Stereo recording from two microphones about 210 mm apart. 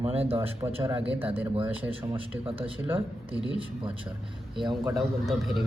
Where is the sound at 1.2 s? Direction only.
10° right (ahead or behind).